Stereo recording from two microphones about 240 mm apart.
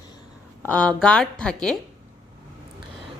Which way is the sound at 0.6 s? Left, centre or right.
Centre.